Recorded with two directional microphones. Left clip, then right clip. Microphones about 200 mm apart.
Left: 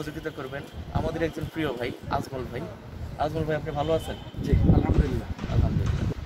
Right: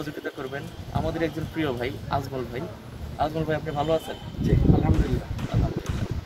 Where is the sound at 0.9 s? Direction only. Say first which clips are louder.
Right 1 dB; 15° left (ahead or behind).